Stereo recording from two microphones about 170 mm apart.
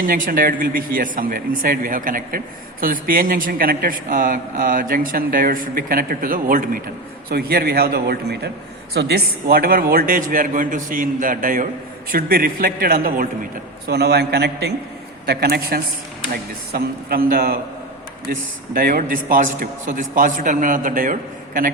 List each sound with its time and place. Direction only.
0.0 s a man's voice: 55° right (ahead or behind)
13.8 s a man's voice: 70° right (ahead or behind)
15.3 s a man's voice: 65° right (ahead or behind)